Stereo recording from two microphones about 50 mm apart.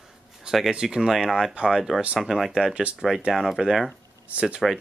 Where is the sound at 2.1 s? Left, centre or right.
Centre.